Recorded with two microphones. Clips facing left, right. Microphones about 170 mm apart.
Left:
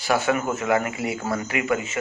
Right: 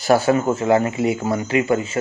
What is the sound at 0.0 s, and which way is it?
Speech, 35° right (ahead or behind).